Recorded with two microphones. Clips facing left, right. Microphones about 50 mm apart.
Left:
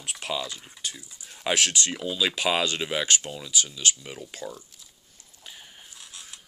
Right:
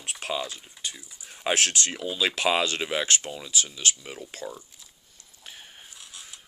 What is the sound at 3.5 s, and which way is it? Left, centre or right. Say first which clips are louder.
Speech: left 1 dB; right.